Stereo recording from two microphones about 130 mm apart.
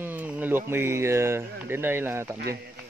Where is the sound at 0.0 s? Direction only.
10° right (ahead or behind).